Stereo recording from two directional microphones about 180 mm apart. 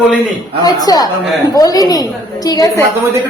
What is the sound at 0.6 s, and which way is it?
A woman's voice, 20° left (ahead or behind).